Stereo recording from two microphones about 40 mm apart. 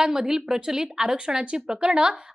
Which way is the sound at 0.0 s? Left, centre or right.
Centre.